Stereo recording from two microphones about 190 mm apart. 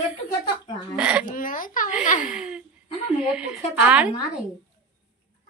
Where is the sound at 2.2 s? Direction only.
5° right (ahead or behind).